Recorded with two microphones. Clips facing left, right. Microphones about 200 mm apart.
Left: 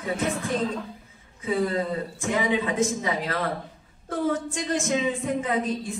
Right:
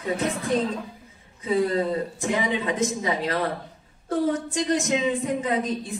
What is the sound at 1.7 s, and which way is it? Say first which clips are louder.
Speech: right 3 dB; 35° right (ahead or behind).